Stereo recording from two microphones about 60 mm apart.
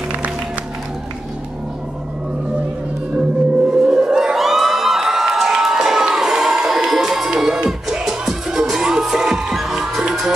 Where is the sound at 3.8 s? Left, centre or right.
Centre.